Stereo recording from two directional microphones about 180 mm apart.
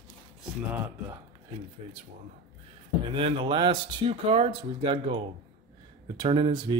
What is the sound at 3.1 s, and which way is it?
Speech, 30° right (ahead or behind).